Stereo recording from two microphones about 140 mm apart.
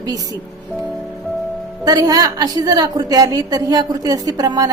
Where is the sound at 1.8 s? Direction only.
25° right (ahead or behind).